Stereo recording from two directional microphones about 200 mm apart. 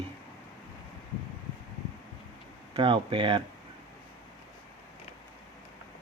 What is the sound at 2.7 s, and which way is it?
Speech, 25° right (ahead or behind).